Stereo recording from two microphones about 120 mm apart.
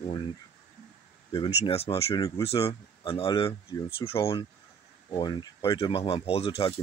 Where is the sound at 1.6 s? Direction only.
55° left (ahead or behind).